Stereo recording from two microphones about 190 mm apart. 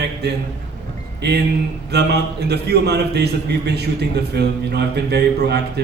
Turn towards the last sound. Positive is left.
turn(degrees=-60)  # may be behind; listen again after turning